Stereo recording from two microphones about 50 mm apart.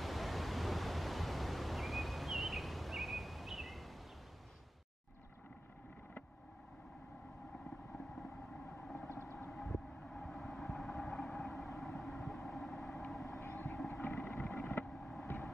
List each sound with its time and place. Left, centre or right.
0.0 s pink noise: centre
8.8 s vehicle: centre
9.1 s vehicle: left
9.5 s vehicle: centre
13.4 s vehicle: left
13.7 s vehicle: centre